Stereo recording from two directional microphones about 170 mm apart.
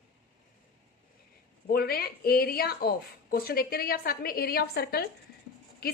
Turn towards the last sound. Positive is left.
turn(degrees=65)  # may be behind; listen again after turning